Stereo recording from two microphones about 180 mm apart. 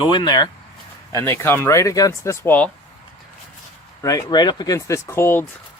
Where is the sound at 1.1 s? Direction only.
15° left (ahead or behind).